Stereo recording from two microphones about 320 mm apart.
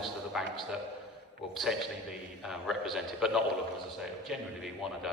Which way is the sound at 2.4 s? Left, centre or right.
Centre.